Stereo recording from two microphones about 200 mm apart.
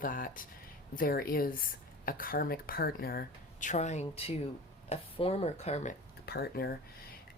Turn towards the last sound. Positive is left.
turn(degrees=55)  # may be behind; listen again after turning